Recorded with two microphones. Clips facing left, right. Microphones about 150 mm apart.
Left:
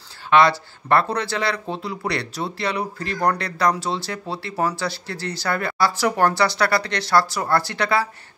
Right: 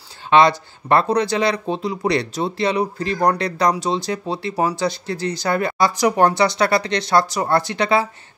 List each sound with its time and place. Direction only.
0.3 s speech: 20° right (ahead or behind)